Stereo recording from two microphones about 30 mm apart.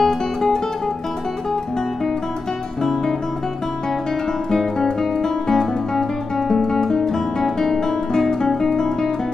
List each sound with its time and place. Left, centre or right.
0.0 s music: centre
2.8 s music: centre
5.2 s guitar: centre